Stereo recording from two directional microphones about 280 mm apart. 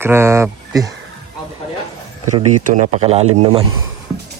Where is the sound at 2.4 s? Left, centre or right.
Right.